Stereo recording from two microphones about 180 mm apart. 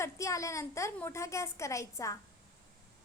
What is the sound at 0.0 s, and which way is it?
A woman's voice, 15° left (ahead or behind).